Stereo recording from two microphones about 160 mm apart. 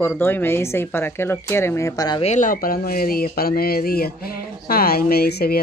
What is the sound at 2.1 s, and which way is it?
Speech, 45° left (ahead or behind).